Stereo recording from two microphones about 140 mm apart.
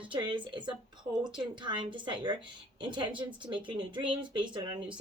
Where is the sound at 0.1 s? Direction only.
35° right (ahead or behind).